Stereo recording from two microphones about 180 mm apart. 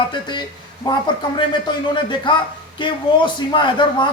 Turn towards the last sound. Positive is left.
turn(degrees=25)  # may be behind; listen again after turning